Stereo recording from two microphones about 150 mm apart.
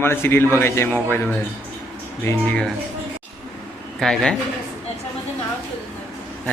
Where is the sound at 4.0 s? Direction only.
5° left (ahead or behind).